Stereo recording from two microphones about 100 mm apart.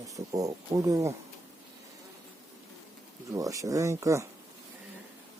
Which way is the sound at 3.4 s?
35° right (ahead or behind).